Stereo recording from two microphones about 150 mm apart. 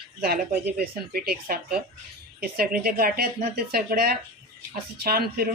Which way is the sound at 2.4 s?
80° right.